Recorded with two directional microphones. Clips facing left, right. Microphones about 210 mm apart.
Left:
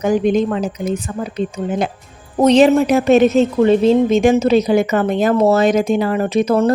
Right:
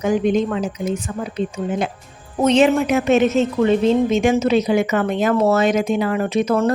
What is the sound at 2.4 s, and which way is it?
Speech, 35° left (ahead or behind).